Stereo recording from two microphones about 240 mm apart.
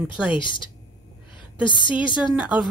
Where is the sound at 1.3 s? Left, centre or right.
Centre.